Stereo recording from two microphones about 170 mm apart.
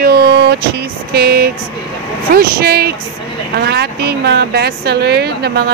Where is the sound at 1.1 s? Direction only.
65° right (ahead or behind).